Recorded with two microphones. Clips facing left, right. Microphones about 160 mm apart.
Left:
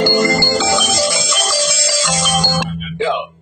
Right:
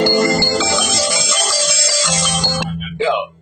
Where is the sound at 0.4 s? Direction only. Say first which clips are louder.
Left 1 dB; 55° left (ahead or behind).